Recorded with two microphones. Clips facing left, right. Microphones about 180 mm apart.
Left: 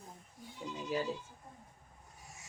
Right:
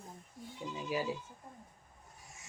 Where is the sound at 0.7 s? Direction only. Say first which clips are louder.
Even; 10° right (ahead or behind).